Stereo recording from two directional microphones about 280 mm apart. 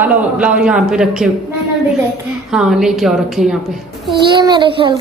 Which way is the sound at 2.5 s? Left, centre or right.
Centre.